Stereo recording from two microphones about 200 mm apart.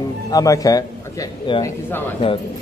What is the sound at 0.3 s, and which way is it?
A man's voice, 15° left (ahead or behind).